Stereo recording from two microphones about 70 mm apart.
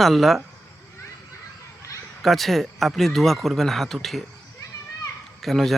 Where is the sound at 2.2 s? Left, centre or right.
Centre.